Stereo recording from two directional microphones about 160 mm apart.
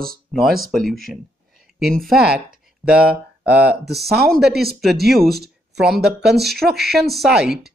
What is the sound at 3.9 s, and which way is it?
Speech, 85° right.